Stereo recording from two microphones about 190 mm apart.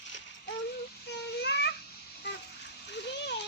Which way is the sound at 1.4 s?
65° left (ahead or behind).